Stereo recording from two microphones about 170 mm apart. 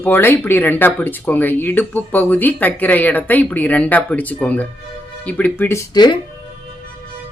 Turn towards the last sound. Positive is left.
turn(degrees=25)  # may be behind; listen again after turning